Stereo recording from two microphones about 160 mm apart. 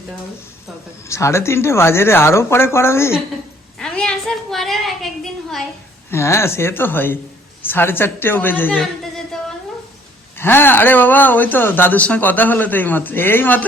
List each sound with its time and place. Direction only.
1.0 s speech: 20° left (ahead or behind)
3.8 s a woman's voice: 5° left (ahead or behind)
6.1 s speech: 15° left (ahead or behind)
10.3 s speech: 15° left (ahead or behind)